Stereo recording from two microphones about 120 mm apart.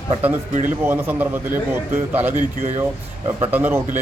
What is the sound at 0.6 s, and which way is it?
A man's voice, 15° right (ahead or behind).